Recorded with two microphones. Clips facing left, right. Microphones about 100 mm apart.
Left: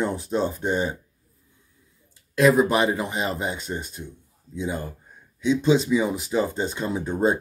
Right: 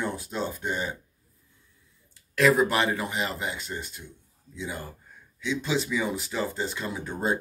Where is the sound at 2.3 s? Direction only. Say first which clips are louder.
Left 4 dB; 20° left (ahead or behind).